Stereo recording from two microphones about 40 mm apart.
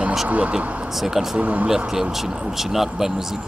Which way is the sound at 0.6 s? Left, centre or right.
Right.